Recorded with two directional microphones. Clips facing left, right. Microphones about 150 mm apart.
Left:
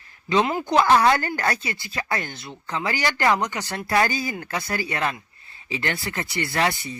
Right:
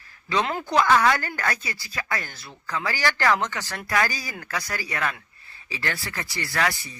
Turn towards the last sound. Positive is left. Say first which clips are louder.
# left 3 dB
turn(degrees=25)  # may be behind; listen again after turning